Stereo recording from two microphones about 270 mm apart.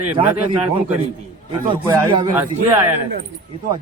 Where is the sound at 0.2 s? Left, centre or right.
Centre.